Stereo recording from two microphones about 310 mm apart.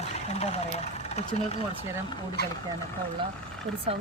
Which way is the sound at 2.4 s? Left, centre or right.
Left.